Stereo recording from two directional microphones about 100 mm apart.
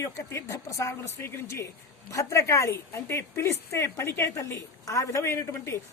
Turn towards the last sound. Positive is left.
turn(degrees=25)  # may be behind; listen again after turning